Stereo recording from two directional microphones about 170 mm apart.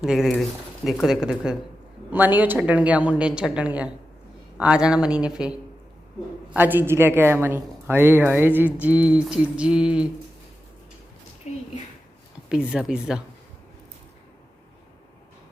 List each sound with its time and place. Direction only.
0.0 s a woman's voice: 5° right (ahead or behind)
11.5 s a woman's voice: 40° left (ahead or behind)
12.5 s speech: 5° right (ahead or behind)